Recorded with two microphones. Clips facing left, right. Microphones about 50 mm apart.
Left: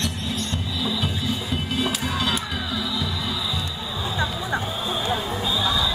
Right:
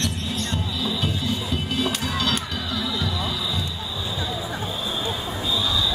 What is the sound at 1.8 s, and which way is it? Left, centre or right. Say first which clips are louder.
Music: even; centre.